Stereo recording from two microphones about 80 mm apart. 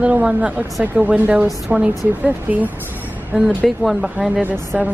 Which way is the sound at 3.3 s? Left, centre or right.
Centre.